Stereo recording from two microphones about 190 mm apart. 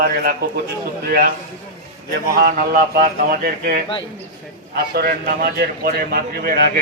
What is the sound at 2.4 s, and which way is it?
A man's voice, 50° right (ahead or behind).